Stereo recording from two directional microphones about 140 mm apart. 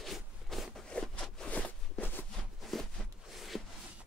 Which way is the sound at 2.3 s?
Centre (ahead or behind).